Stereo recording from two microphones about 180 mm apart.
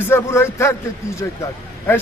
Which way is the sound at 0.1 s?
15° left (ahead or behind).